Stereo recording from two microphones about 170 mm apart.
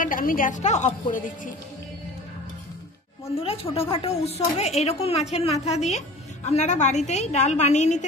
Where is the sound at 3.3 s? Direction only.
35° left (ahead or behind).